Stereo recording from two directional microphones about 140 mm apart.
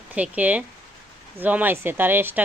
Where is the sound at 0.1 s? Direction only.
10° right (ahead or behind).